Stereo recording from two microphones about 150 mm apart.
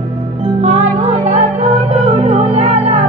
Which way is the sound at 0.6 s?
45° right (ahead or behind).